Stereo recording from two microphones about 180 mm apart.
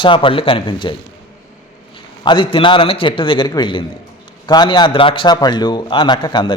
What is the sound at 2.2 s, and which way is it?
A man's voice, 25° left (ahead or behind).